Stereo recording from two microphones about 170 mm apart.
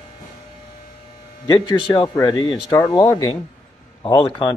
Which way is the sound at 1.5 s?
30° left (ahead or behind).